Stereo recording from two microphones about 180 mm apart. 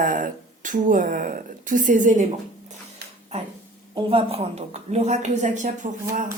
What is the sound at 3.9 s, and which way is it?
A woman's voice, 30° right (ahead or behind).